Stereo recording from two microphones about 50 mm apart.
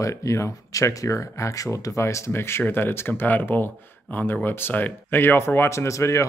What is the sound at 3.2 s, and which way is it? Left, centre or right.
Speech, left.